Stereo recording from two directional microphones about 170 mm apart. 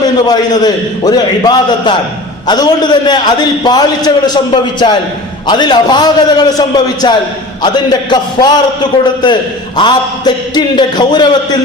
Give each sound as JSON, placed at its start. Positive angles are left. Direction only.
{"t": 0.0, "sound": "a man's voice", "side_deg": 25}